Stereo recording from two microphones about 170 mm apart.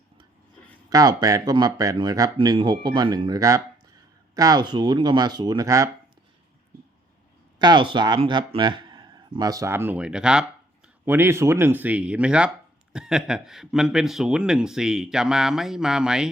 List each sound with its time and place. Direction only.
0.9 s speech: 20° right (ahead or behind)
7.6 s a man's voice: 25° right (ahead or behind); by 16.3 s 5° right (ahead or behind)